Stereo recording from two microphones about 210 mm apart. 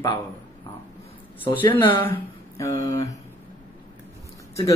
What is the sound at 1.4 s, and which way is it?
Speech, 25° left (ahead or behind).